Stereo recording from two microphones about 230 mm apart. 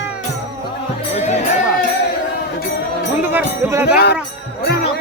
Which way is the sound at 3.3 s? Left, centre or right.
Centre.